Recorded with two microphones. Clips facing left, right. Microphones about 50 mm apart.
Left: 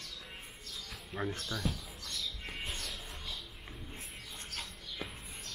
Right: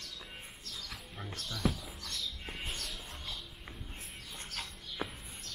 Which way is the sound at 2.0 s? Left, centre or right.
Centre.